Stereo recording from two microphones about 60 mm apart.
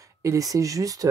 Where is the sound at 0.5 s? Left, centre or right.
Right.